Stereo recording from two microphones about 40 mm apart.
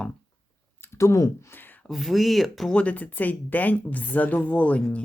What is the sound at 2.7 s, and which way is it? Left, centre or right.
Speech, left.